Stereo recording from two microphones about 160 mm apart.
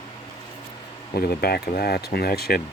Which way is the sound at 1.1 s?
75° left (ahead or behind).